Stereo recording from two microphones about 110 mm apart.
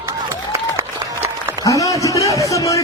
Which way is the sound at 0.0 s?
25° right (ahead or behind).